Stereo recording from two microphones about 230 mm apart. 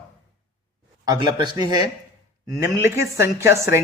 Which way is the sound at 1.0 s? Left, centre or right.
Centre.